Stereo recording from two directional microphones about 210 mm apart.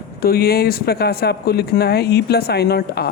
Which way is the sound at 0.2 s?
45° left (ahead or behind).